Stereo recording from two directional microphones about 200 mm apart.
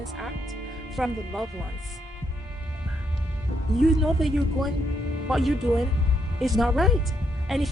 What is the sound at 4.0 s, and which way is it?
A woman's voice, centre (ahead or behind).